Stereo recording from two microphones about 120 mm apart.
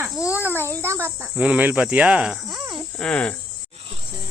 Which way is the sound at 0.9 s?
20° right (ahead or behind).